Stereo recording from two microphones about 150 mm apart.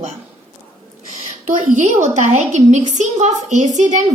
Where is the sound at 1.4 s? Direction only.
55° right (ahead or behind).